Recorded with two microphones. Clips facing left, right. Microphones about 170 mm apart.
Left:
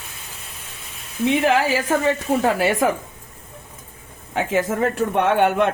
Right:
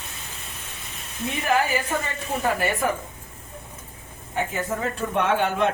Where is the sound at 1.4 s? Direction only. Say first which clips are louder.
Left 4 dB; 90° left.